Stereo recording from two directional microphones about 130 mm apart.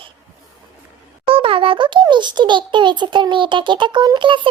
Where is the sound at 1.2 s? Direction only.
45° right (ahead or behind).